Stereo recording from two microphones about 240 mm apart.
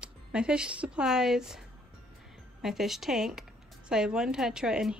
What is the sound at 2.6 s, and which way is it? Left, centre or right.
Speech, centre.